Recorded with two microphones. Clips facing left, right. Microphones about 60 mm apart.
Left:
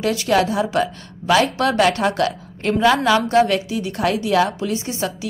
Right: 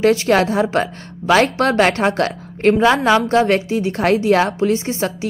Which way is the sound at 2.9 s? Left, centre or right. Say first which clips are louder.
Right 2 dB; right.